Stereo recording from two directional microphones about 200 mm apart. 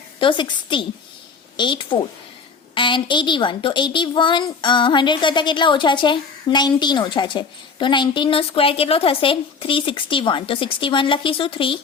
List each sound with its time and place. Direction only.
0.2 s a woman's voice: 25° left (ahead or behind)